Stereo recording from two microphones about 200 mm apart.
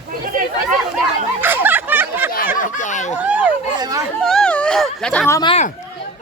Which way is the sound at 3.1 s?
10° right (ahead or behind).